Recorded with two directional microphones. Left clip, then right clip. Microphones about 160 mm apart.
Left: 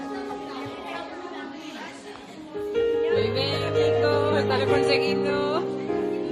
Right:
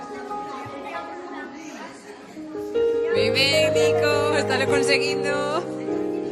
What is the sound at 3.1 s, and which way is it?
Music, 50° right (ahead or behind).